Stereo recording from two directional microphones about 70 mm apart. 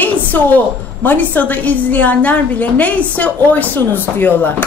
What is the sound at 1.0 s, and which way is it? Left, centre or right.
A woman's voice, left.